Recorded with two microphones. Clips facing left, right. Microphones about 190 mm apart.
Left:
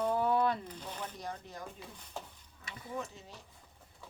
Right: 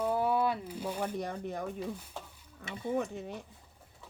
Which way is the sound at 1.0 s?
55° right (ahead or behind).